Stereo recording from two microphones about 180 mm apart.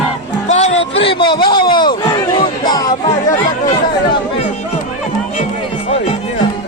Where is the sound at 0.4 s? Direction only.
40° left (ahead or behind).